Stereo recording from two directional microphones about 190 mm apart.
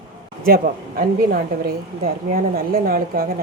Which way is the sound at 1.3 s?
50° right (ahead or behind).